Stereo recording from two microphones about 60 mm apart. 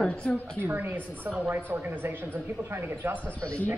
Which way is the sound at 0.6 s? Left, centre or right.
Right.